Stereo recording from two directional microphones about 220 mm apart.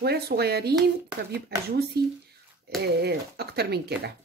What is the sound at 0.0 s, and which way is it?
Speech, 45° right (ahead or behind).